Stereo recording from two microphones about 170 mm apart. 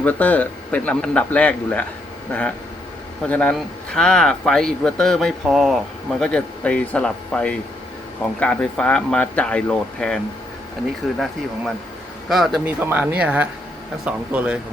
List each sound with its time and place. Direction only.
0.0 s speech: 10° left (ahead or behind)
3.2 s speech: 10° left (ahead or behind)
12.3 s speech: centre (ahead or behind)